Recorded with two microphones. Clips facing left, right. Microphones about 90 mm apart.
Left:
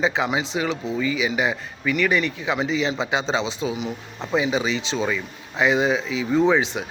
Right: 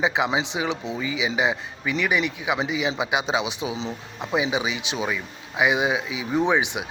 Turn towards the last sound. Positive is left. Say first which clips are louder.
# left 3 dB
turn(degrees=-15)  # may be behind; listen again after turning